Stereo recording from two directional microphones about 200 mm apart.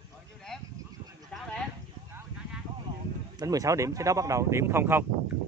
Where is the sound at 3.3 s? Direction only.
15° right (ahead or behind).